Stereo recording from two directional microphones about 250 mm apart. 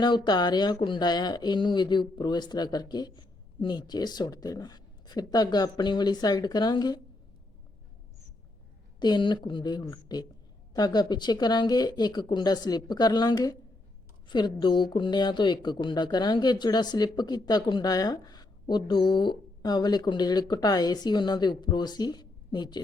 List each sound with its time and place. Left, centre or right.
0.0 s speech: centre
9.0 s speech: centre